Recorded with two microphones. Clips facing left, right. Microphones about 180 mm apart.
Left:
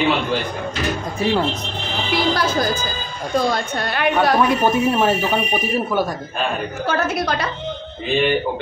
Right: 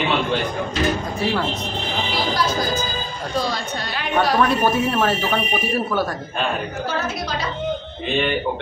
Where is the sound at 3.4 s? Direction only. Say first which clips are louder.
Left 5 dB; 55° left (ahead or behind).